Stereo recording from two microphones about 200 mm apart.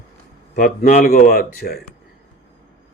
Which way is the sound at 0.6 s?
40° left (ahead or behind).